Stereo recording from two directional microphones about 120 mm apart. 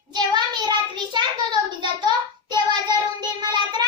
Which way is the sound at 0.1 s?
35° right (ahead or behind).